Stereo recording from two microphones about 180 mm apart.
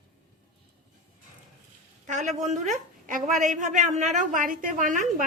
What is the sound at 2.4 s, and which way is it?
A woman's voice, 40° right (ahead or behind).